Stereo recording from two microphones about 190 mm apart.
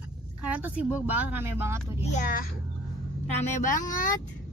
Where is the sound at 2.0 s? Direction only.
40° left (ahead or behind).